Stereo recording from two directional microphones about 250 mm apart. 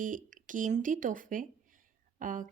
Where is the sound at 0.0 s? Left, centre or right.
Right.